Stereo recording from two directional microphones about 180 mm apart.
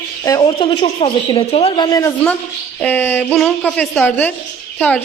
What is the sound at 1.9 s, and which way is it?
A woman's voice, 20° left (ahead or behind).